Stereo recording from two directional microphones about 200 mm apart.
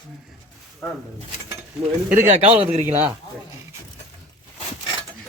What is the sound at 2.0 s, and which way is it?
Speech, 40° right (ahead or behind).